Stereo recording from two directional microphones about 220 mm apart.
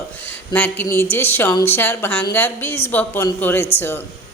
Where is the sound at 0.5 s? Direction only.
5° left (ahead or behind).